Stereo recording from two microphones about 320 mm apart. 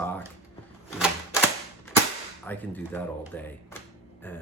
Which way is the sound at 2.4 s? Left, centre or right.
Centre.